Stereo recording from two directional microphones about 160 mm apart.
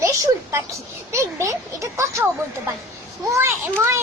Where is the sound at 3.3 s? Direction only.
15° right (ahead or behind).